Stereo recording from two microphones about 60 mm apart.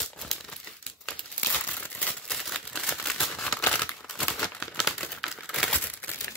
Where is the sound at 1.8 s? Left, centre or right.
Left.